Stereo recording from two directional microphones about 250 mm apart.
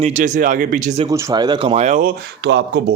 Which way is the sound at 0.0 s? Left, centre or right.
Right.